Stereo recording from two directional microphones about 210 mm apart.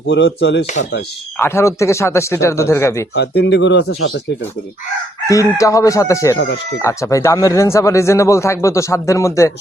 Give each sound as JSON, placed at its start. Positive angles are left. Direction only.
{"t": 0.1, "sound": "speech", "side_deg": 55}
{"t": 0.6, "sound": "speech", "side_deg": 35}
{"t": 1.4, "sound": "speech", "side_deg": 10}
{"t": 3.2, "sound": "speech", "side_deg": 55}
{"t": 5.2, "sound": "speech", "side_deg": 15}
{"t": 6.3, "sound": "speech", "side_deg": 55}
{"t": 6.7, "sound": "speech", "side_deg": 15}